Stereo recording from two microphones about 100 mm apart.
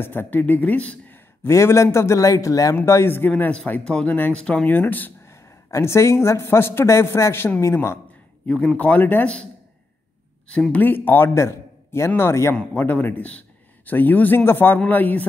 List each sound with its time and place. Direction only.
0.0 s speech: 20° left (ahead or behind)
8.5 s a man's voice: 15° left (ahead or behind)
10.5 s a man's voice: 15° left (ahead or behind)